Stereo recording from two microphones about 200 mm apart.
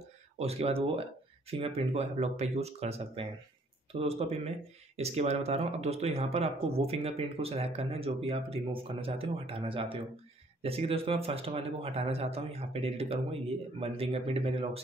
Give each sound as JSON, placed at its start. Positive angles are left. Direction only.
{"t": 0.4, "sound": "speech", "side_deg": -30}